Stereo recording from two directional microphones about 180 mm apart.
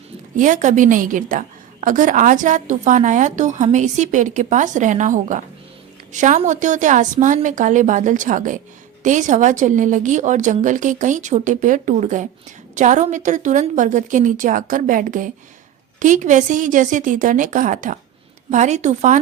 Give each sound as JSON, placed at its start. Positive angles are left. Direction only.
{"t": 0.3, "sound": "a woman's voice", "side_deg": -45}